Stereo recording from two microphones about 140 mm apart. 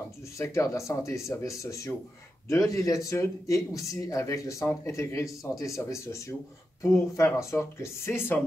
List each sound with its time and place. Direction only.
0.4 s speech: 20° left (ahead or behind)